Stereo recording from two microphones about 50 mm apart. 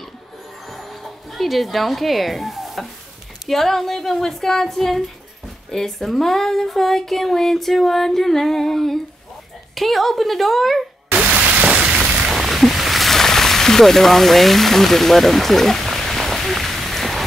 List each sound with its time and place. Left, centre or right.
0.7 s music: centre
3.4 s speech: centre
11.1 s rain: right
12.3 s a sound: centre